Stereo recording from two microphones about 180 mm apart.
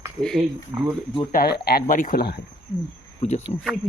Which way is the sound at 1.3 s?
60° left (ahead or behind).